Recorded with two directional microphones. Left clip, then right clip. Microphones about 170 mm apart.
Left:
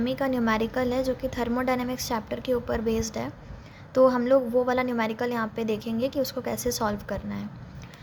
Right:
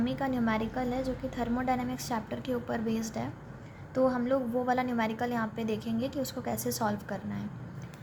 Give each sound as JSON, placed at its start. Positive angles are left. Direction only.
{"t": 0.0, "sound": "a woman's voice", "side_deg": 25}